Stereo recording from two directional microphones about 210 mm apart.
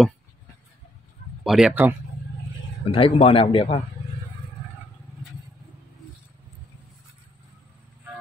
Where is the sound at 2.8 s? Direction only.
25° left (ahead or behind).